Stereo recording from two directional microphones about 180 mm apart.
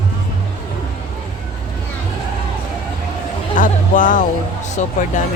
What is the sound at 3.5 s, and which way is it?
Speech, 45° left (ahead or behind).